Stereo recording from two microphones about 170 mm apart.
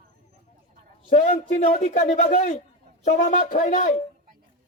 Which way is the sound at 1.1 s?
40° left (ahead or behind).